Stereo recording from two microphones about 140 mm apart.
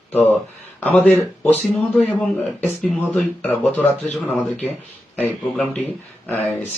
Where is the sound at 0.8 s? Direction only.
10° left (ahead or behind).